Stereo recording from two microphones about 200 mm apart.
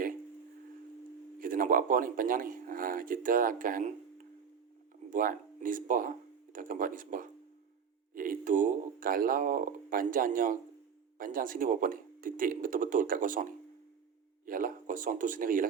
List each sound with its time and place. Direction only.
1.4 s speech: 45° right (ahead or behind)
5.1 s speech: 40° right (ahead or behind)